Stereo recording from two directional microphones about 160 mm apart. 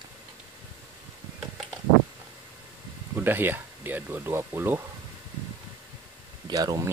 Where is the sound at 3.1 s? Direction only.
15° right (ahead or behind).